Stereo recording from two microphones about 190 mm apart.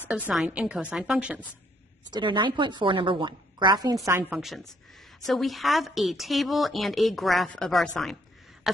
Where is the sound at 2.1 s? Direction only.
25° right (ahead or behind).